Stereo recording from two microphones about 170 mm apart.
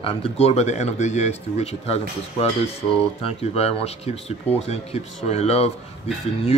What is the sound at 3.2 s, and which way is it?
Speech, 35° left (ahead or behind).